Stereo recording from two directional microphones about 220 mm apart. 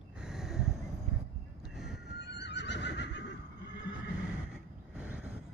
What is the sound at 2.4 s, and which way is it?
Neigh, 50° left (ahead or behind).